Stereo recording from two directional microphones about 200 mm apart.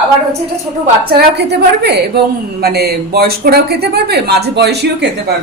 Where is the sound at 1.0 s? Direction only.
55° right (ahead or behind).